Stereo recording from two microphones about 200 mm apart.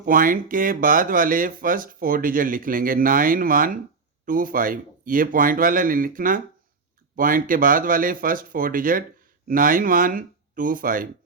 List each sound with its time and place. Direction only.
0.0 s speech: 45° right (ahead or behind)